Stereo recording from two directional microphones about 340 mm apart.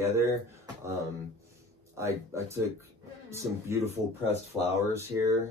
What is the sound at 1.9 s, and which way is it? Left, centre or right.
Speech, centre.